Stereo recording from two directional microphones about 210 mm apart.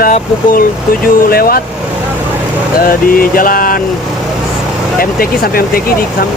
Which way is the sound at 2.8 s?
40° left (ahead or behind).